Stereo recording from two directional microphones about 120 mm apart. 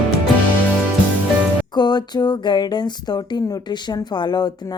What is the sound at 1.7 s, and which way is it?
A woman's voice, 35° left (ahead or behind).